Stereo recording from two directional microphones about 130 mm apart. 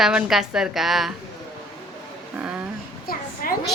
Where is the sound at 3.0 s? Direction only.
90° left.